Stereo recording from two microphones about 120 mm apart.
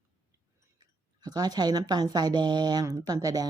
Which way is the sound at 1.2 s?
35° right (ahead or behind).